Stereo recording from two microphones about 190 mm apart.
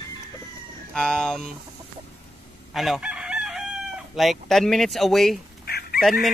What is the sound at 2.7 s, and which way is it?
Chicken, centre (ahead or behind).